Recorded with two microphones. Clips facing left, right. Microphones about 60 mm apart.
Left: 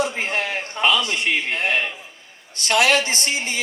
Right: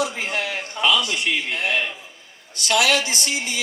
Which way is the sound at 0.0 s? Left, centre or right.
Left.